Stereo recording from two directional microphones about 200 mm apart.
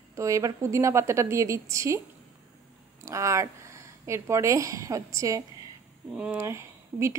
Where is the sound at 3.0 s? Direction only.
15° right (ahead or behind).